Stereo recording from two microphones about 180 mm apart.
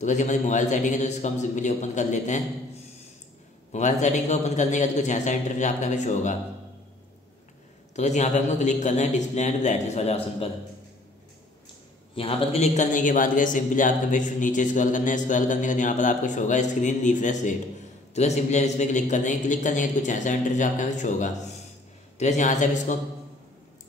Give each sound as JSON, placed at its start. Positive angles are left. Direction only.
{"t": 0.0, "sound": "a man's voice", "side_deg": 40}
{"t": 3.7, "sound": "a man's voice", "side_deg": 40}
{"t": 7.9, "sound": "a man's voice", "side_deg": 40}
{"t": 12.2, "sound": "a man's voice", "side_deg": 35}